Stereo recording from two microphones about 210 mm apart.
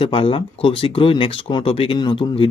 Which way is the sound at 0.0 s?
25° left (ahead or behind).